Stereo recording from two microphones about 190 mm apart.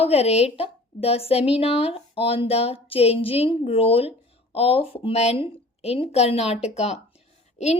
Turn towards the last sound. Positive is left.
turn(degrees=35)  # may be behind; listen again after turning